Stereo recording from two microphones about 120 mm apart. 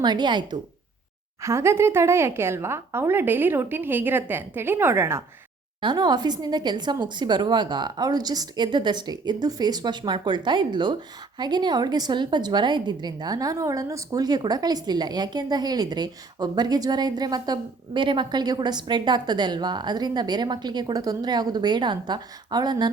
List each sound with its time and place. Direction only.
0.0 s a woman's voice: 40° right (ahead or behind)
1.4 s a woman's voice: 25° right (ahead or behind)
5.8 s a woman's voice: 35° right (ahead or behind)